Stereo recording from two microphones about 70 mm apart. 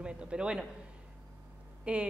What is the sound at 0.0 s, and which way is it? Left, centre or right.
Speech, centre.